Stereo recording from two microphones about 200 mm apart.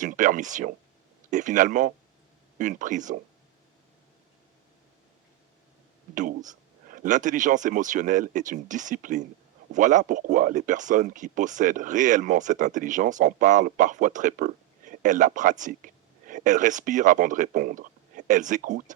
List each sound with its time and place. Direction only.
0.0 s speech: 40° right (ahead or behind)
6.1 s speech: 40° right (ahead or behind)